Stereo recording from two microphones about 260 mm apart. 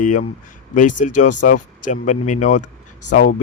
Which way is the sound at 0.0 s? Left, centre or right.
Left.